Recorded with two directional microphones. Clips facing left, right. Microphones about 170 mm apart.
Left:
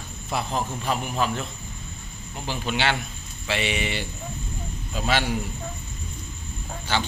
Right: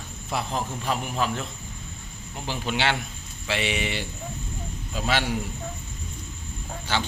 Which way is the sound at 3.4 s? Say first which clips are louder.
Left 1 dB; 5° right (ahead or behind).